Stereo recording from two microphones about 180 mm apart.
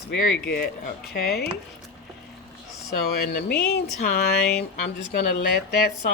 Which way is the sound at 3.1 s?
60° left (ahead or behind).